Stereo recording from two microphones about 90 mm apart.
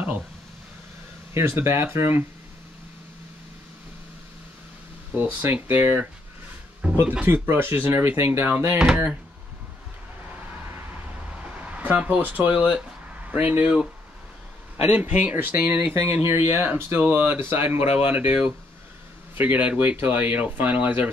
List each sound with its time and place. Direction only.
1.3 s speech: 30° right (ahead or behind)
5.1 s speech: 25° right (ahead or behind)
8.7 s speech: 10° right (ahead or behind)
11.6 s speech: 20° right (ahead or behind)
14.9 s speech: 20° right (ahead or behind)